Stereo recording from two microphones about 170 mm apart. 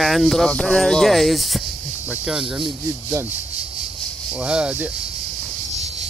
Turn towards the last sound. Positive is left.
turn(degrees=-5)  # may be behind; listen again after turning